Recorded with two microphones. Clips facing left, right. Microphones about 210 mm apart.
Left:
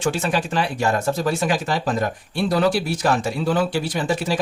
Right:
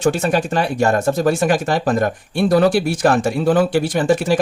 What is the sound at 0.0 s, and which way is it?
Speech, 45° right (ahead or behind).